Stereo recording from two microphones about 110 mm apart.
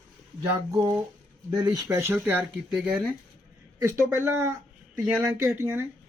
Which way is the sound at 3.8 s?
25° right (ahead or behind).